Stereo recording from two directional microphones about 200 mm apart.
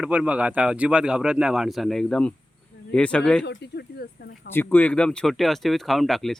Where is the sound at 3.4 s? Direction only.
55° left (ahead or behind).